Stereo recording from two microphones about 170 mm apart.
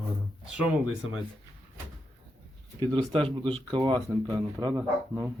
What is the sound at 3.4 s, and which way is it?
Speech, 30° right (ahead or behind).